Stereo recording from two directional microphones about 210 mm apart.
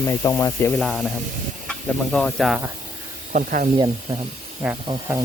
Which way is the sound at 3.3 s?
40° right (ahead or behind).